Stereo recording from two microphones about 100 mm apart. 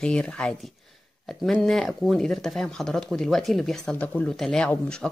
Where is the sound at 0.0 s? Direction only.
10° left (ahead or behind).